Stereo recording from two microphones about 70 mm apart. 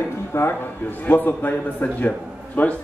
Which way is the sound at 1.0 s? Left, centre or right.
Left.